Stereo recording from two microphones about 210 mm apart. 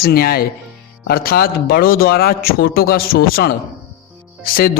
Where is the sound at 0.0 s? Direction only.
45° left (ahead or behind).